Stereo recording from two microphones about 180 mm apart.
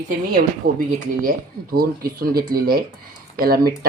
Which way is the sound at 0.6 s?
55° right (ahead or behind).